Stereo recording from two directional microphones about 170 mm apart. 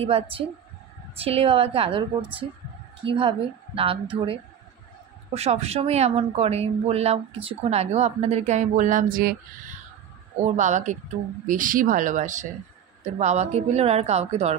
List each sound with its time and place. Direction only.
0.0 s a woman's voice: 35° right (ahead or behind); by 9.3 s 50° right (ahead or behind)
10.4 s a woman's voice: 45° right (ahead or behind)